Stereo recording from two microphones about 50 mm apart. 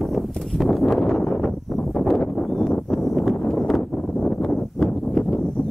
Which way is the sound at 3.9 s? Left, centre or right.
Left.